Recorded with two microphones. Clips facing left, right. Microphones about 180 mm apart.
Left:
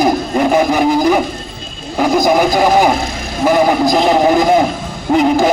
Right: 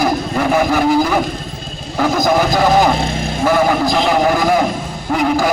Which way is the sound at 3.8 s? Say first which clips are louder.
Left 3 dB; 20° left (ahead or behind).